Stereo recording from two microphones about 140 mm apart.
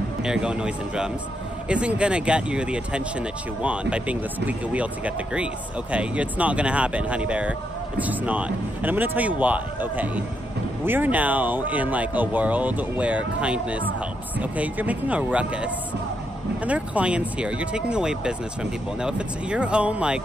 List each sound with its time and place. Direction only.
0.2 s a man's voice: 5° right (ahead or behind)